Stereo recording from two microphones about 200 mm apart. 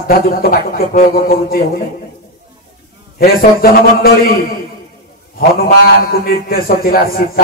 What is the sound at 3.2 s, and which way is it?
A man's voice, 50° left (ahead or behind).